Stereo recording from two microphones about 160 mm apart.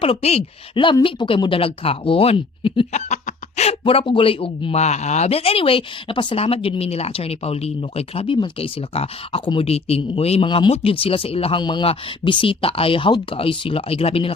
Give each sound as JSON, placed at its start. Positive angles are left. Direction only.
{"t": 0.0, "sound": "speech", "side_deg": 40}
{"t": 2.9, "sound": "speech", "side_deg": 45}